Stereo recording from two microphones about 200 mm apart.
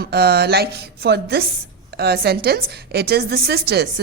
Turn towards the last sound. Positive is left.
turn(degrees=-55)  # may be behind; listen again after turning